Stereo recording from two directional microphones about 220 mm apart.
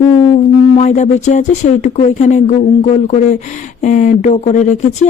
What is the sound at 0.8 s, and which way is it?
Speech, 30° left (ahead or behind).